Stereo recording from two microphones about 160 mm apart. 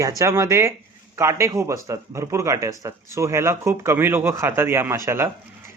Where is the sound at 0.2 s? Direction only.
20° right (ahead or behind).